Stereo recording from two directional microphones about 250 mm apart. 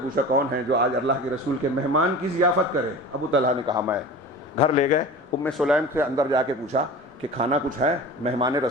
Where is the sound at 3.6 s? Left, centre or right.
Centre.